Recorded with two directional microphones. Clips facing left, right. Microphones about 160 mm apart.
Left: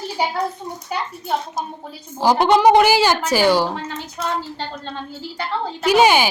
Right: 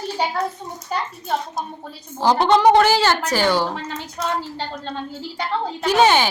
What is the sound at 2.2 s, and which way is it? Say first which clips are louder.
A woman's voice: left 1 dB; 10° left (ahead or behind).